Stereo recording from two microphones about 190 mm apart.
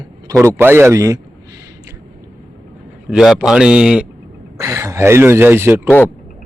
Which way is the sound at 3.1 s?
Centre (ahead or behind).